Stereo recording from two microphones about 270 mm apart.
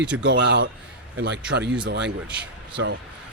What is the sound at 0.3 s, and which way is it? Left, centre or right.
Speech, right.